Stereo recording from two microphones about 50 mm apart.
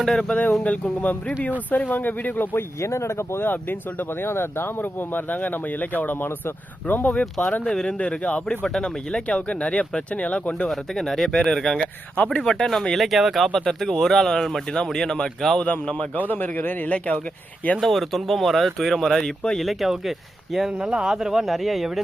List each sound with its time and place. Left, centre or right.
0.0 s speech: centre
0.3 s speech: left
2.6 s speech: left
3.4 s speech: left
7.6 s speech: centre
7.9 s speech: left
8.6 s speech: centre; by 10.7 s left
10.7 s speech: centre
13.0 s speech: centre
15.6 s speech: left
16.3 s speech: left
17.7 s speech: centre
19.6 s speech: centre
20.7 s speech: centre